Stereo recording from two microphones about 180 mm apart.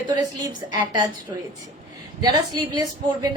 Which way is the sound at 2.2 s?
20° right (ahead or behind).